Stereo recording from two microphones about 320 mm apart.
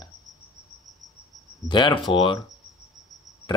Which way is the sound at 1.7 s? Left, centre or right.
Centre.